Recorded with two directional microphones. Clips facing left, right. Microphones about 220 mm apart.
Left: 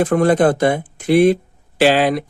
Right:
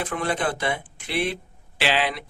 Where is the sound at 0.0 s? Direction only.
45° left (ahead or behind).